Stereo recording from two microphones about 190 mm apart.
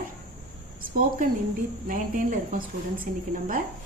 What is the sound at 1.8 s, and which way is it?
A woman's voice, 45° right (ahead or behind).